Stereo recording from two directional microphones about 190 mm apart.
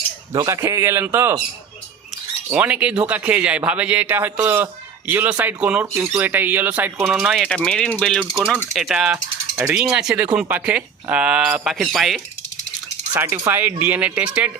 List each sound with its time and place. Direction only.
0.3 s speech: 15° right (ahead or behind)
2.5 s speech: 10° right (ahead or behind)
9.1 s mechanisms: 15° right (ahead or behind)
9.7 s speech: 5° right (ahead or behind)
13.1 s speech: 10° right (ahead or behind)